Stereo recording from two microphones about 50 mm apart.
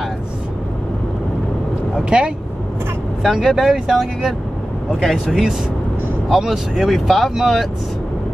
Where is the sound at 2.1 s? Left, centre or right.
Centre.